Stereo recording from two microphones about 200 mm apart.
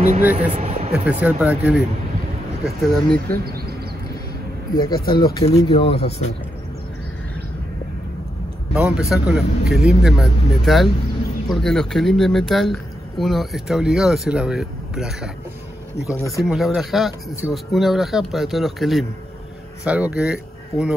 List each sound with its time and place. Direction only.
0.2 s speech: 10° right (ahead or behind)
0.5 s speech: 30° right (ahead or behind)
0.9 s speech: 5° right (ahead or behind)
2.6 s speech: 5° left (ahead or behind)
4.7 s speech: 20° left (ahead or behind)
5.0 s speech: 50° left (ahead or behind)
5.7 s speech: 30° left (ahead or behind)
8.7 s speech: 5° right (ahead or behind)
16.1 s speech: 15° left (ahead or behind)
16.4 s speech: centre (ahead or behind)